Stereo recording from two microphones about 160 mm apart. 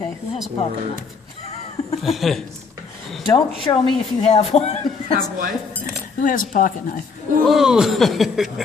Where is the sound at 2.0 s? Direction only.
Centre (ahead or behind).